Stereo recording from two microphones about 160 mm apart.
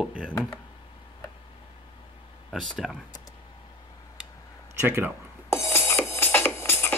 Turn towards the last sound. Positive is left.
turn(degrees=15)  # may be behind; listen again after turning